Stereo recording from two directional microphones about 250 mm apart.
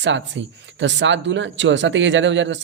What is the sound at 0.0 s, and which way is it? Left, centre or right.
Speech, right.